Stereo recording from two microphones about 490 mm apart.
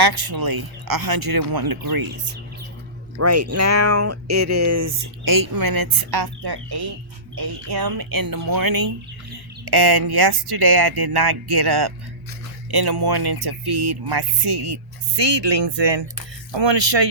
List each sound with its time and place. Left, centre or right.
0.3 s speech: right
3.2 s speech: right
14.4 s speech: right